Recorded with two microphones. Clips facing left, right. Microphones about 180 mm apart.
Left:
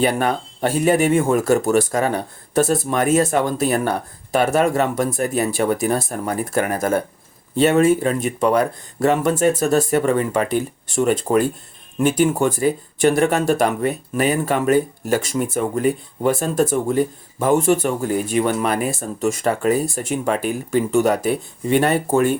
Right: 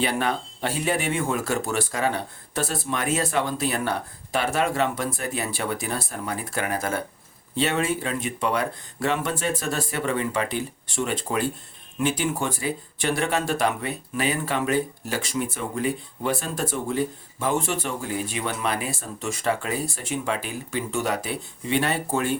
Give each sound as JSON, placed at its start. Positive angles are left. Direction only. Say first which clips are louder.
{"t": 0.0, "sound": "speech", "louder": "left 6 dB", "side_deg": 45}